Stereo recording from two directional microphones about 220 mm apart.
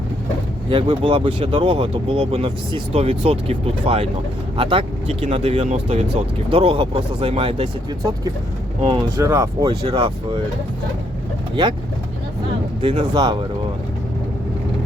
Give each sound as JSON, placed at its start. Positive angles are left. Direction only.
{"t": 0.7, "sound": "speech", "side_deg": -25}
{"t": 8.8, "sound": "speech", "side_deg": -25}
{"t": 9.1, "sound": "speech", "side_deg": -15}
{"t": 12.8, "sound": "speech", "side_deg": -25}